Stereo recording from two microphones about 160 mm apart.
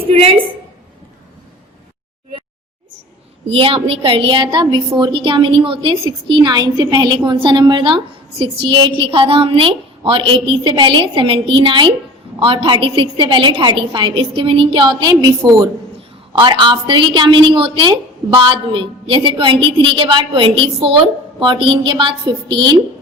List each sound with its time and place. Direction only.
0.1 s a woman's voice: 35° right (ahead or behind)
3.4 s a woman's voice: 35° right (ahead or behind)